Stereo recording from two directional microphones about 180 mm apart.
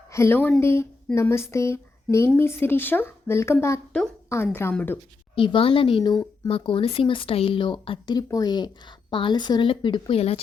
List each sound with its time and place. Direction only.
0.1 s speech: 15° left (ahead or behind)
5.3 s speech: 30° left (ahead or behind)